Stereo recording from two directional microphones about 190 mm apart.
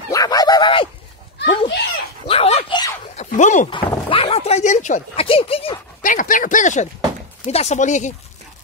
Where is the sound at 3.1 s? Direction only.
40° left (ahead or behind).